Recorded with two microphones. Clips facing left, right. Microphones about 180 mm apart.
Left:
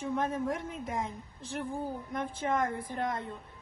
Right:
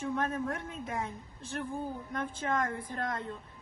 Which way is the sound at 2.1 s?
10° left (ahead or behind).